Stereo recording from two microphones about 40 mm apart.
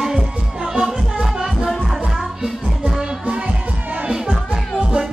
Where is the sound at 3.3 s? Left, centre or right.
Right.